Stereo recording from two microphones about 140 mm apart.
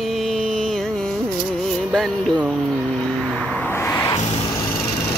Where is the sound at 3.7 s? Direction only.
15° left (ahead or behind).